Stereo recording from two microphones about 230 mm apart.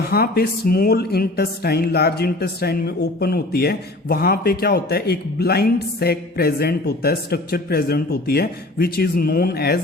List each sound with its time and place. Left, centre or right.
0.1 s speech: left